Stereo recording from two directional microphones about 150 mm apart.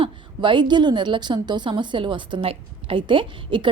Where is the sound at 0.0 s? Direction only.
35° right (ahead or behind).